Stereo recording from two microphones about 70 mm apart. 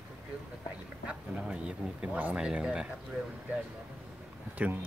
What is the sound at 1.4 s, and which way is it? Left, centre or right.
Speech, centre.